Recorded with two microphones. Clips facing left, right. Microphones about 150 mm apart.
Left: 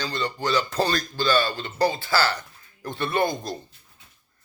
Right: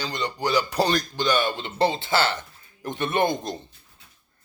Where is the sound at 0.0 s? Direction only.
15° right (ahead or behind).